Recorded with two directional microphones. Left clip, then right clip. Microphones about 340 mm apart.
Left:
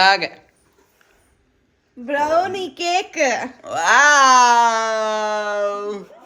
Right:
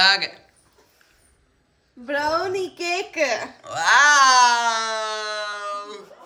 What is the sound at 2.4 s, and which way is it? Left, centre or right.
A woman's voice, left.